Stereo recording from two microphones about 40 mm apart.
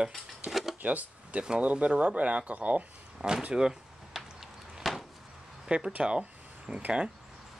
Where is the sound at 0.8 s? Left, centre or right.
Right.